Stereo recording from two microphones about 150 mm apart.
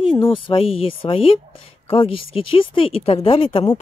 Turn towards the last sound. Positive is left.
turn(degrees=35)  # may be behind; listen again after turning